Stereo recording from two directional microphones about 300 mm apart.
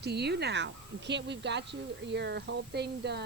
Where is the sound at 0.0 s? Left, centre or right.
Right.